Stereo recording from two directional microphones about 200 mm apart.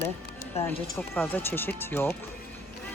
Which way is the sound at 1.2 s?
10° left (ahead or behind).